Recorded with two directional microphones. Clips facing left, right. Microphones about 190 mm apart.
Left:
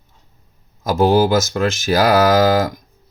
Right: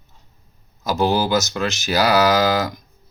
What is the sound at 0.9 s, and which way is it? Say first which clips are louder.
Speech: left 5 dB; 50° left (ahead or behind).